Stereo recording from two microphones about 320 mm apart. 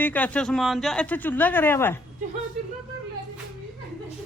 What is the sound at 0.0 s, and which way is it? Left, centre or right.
Speech, centre.